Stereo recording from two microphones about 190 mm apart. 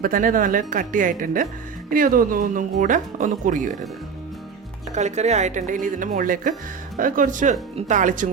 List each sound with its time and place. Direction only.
0.0 s speech: 45° right (ahead or behind)
4.9 s a woman's voice: 35° right (ahead or behind)